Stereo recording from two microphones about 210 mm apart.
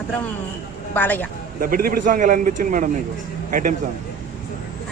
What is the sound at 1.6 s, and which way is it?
A man's voice, 40° right (ahead or behind).